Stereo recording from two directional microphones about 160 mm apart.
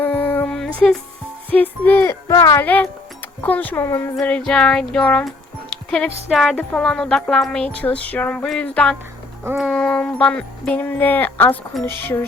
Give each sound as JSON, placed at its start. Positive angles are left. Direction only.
{"t": 0.0, "sound": "a sound", "side_deg": 10}
{"t": 1.5, "sound": "speech", "side_deg": 10}
{"t": 2.2, "sound": "speech", "side_deg": 20}
{"t": 4.2, "sound": "music", "side_deg": 5}
{"t": 7.8, "sound": "speech", "side_deg": 10}